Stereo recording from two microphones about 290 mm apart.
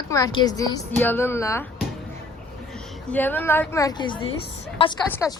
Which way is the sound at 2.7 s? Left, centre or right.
Centre.